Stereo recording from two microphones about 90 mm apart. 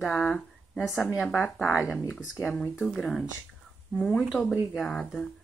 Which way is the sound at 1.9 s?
20° left (ahead or behind).